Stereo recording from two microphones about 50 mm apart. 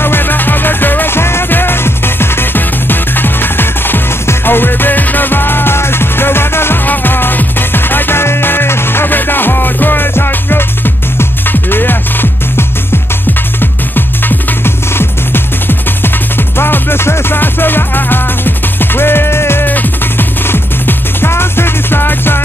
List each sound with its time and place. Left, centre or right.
0.0 s music: left
19.6 s music: left
20.4 s music: left